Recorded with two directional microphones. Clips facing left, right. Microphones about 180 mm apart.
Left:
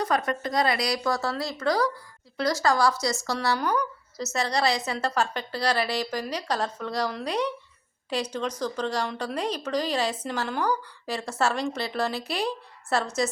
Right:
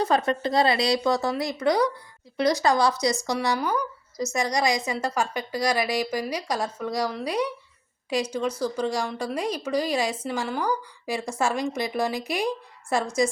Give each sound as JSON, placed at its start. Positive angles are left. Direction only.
{"t": 0.0, "sound": "speech", "side_deg": -25}